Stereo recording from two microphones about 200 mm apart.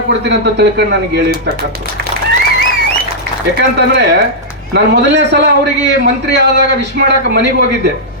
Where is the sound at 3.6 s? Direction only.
60° right (ahead or behind).